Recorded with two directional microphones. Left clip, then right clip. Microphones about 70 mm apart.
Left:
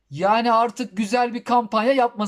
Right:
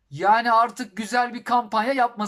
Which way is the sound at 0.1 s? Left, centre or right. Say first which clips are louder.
Even; left.